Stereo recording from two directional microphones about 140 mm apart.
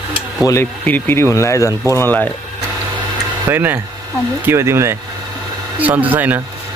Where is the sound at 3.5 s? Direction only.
15° right (ahead or behind).